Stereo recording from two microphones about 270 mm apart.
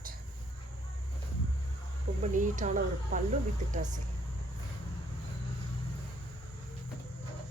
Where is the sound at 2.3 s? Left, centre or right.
Right.